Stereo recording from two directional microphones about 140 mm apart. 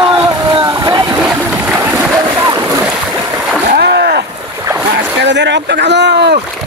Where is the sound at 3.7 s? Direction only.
90° right.